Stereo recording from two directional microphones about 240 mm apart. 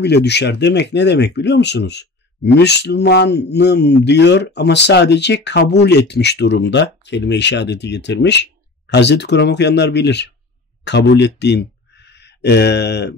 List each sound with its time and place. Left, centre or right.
0.0 s speech: left